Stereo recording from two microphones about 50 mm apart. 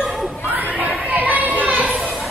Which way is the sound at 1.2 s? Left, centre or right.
Right.